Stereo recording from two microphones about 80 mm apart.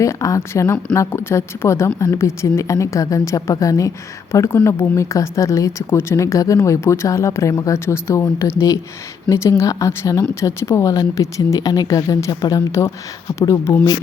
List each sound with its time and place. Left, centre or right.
0.0 s a woman's voice: left
10.9 s speech: left
13.5 s a woman's voice: left